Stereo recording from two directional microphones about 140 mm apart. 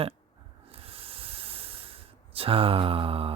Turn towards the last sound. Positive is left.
turn(degrees=-40)  # may be behind; listen again after turning